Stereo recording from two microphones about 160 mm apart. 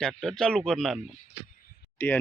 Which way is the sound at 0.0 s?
Centre (ahead or behind).